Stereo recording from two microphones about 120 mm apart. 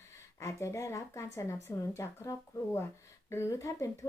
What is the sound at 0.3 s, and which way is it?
Speech, 25° left (ahead or behind).